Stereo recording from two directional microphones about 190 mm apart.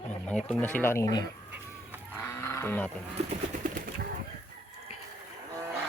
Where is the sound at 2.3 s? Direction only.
15° left (ahead or behind).